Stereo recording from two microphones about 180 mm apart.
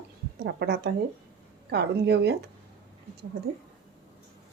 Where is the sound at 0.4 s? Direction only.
65° right (ahead or behind).